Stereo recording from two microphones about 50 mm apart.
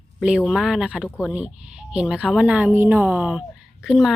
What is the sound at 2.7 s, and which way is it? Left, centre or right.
Speech, right.